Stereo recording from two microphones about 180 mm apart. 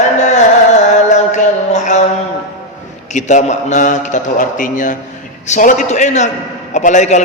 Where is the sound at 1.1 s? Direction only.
40° left (ahead or behind).